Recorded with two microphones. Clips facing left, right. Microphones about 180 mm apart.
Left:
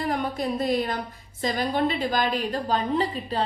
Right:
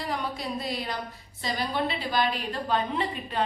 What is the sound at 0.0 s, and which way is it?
A woman's voice, 50° left (ahead or behind).